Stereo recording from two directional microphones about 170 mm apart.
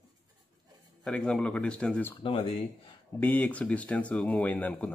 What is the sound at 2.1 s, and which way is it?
Speech, 30° left (ahead or behind).